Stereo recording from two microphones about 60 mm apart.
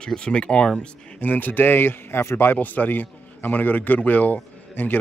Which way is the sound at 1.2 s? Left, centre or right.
Left.